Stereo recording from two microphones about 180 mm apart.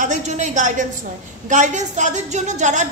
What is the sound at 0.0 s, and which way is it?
A woman's voice, 45° right (ahead or behind).